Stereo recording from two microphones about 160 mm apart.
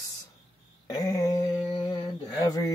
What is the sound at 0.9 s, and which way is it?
Speech, 25° left (ahead or behind).